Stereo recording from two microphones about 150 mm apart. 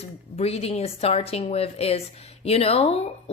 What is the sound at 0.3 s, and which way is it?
A woman's voice, 45° left (ahead or behind).